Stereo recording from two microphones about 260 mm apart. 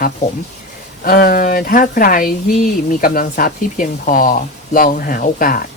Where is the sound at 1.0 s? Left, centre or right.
Left.